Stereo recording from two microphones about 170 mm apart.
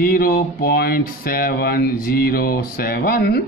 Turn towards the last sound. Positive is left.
turn(degrees=65)  # may be behind; listen again after turning